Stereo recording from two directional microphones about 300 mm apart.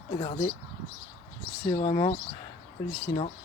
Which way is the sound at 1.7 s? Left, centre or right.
Centre.